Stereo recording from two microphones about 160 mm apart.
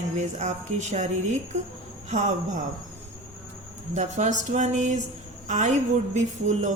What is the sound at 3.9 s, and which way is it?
A woman's voice, 45° right (ahead or behind).